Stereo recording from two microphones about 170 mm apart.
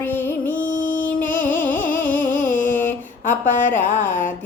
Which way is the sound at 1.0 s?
10° left (ahead or behind).